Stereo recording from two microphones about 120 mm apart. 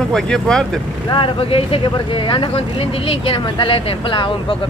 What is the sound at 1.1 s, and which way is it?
Speech, 50° left (ahead or behind).